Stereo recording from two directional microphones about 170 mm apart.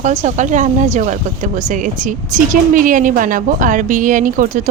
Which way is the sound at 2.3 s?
50° right (ahead or behind).